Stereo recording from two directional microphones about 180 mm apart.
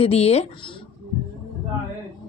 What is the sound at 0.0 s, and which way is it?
Speech, 35° left (ahead or behind).